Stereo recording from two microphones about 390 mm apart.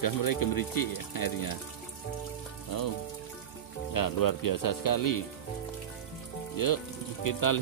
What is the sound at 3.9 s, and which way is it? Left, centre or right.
Speech, left.